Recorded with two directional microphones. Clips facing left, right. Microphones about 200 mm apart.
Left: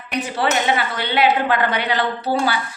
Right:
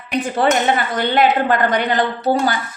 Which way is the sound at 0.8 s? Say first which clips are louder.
Right 3 dB; 45° right (ahead or behind).